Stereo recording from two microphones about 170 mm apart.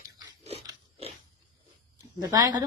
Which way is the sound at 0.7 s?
30° right (ahead or behind).